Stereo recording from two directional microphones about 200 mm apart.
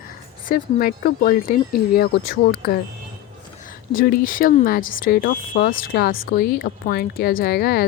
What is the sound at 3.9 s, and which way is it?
Speech, 45° left (ahead or behind).